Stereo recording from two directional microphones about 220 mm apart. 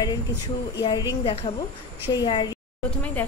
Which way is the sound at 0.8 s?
20° left (ahead or behind).